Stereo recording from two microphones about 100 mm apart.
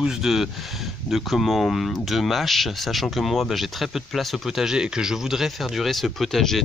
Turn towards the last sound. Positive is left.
turn(degrees=0)  # may be behind; listen again after turning